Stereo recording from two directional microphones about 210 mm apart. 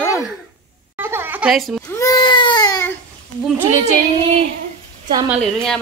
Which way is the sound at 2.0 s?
20° left (ahead or behind).